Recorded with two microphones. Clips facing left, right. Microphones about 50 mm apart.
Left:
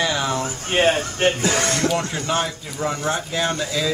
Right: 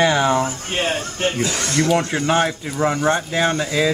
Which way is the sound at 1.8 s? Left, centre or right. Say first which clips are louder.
Right 4 dB; centre.